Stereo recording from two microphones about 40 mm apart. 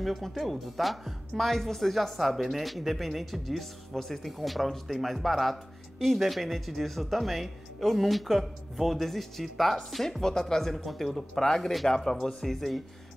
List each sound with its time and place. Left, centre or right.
0.0 s speech: centre